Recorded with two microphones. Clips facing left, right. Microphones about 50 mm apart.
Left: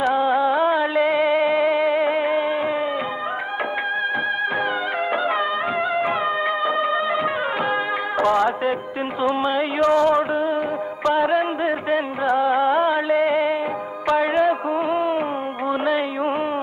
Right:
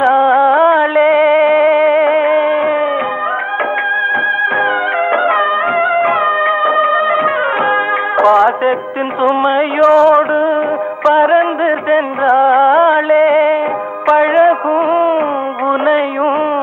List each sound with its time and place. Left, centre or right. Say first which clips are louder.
0.0 s music: right 9 dB; right
5.1 s music: right 10 dB; right
8.2 s music: right 10 dB; right